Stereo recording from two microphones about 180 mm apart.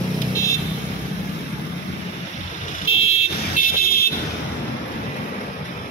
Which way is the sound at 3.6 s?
45° left (ahead or behind).